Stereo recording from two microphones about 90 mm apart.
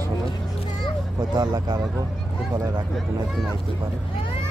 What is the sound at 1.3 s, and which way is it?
Speech, 50° right (ahead or behind).